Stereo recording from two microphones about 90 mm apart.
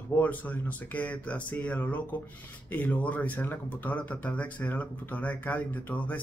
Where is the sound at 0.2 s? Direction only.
15° left (ahead or behind).